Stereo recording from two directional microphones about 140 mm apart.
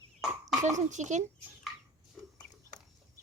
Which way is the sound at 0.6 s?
60° right (ahead or behind).